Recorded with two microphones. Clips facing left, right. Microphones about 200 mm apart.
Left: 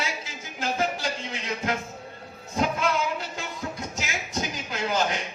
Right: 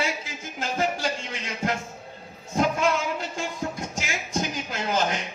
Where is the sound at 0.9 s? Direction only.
45° right (ahead or behind).